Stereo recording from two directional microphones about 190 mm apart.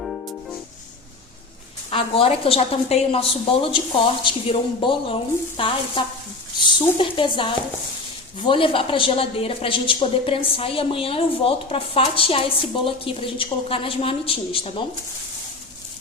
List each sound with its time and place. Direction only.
0.0 s music: centre (ahead or behind)
1.9 s a woman's voice: 30° left (ahead or behind)